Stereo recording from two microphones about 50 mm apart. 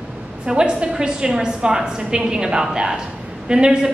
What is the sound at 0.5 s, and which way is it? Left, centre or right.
A woman's voice, centre.